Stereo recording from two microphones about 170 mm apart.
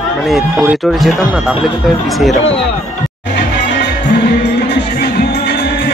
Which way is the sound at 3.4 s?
90° left.